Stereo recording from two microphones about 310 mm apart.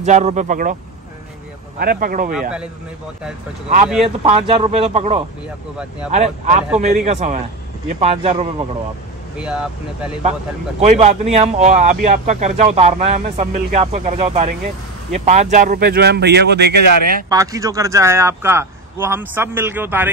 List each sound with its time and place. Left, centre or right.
0.0 s speech: right
1.8 s speech: right
3.6 s speech: right
9.4 s speech: centre
10.8 s speech: right
17.3 s speech: centre